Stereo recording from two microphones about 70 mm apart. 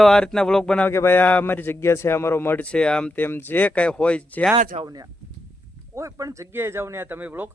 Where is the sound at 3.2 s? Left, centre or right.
Left.